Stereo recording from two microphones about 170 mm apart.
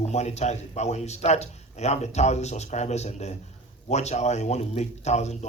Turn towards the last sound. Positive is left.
turn(degrees=40)  # may be behind; listen again after turning